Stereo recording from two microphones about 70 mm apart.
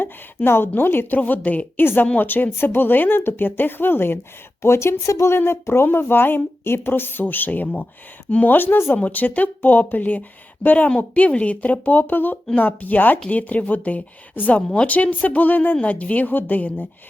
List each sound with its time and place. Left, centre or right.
0.0 s speech: left